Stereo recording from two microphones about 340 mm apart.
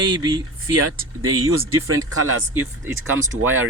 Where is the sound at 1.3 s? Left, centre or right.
Right.